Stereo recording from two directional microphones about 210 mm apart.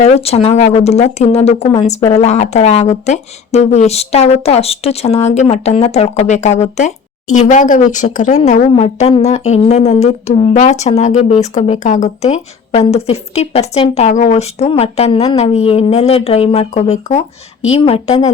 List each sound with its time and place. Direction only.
0.0 s a woman's voice: 30° left (ahead or behind)